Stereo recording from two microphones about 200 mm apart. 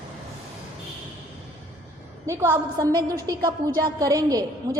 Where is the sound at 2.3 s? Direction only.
15° right (ahead or behind).